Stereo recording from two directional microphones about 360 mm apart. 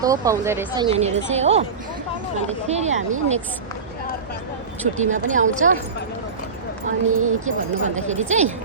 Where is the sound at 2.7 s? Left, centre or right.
Centre.